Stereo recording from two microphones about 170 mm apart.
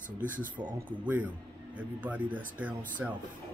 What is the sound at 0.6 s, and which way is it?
A man's voice, 10° right (ahead or behind).